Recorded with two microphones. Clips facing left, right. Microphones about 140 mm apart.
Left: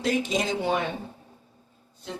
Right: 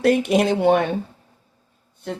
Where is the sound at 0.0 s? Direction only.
65° right (ahead or behind).